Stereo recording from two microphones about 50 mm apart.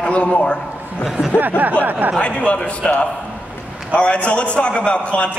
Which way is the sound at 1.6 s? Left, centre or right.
Right.